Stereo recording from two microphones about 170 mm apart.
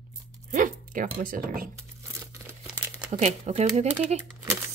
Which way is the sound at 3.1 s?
40° right (ahead or behind).